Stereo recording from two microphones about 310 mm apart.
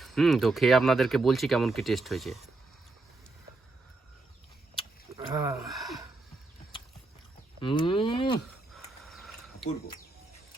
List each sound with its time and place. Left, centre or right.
0.0 s speech: centre
5.1 s speech: centre
5.6 s gasp: centre
7.6 s speech: centre
8.7 s a sound: centre